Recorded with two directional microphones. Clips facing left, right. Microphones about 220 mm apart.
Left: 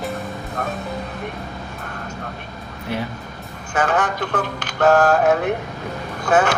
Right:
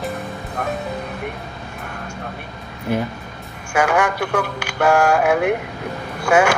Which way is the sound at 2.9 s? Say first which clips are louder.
Right 4 dB; 50° right (ahead or behind).